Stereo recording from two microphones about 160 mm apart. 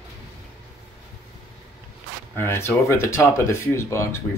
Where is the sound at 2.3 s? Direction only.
15° left (ahead or behind).